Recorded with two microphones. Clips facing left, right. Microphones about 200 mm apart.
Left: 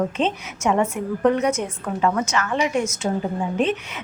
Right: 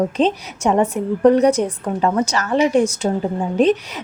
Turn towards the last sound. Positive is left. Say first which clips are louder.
# right 6 dB
turn(degrees=-35)  # may be behind; listen again after turning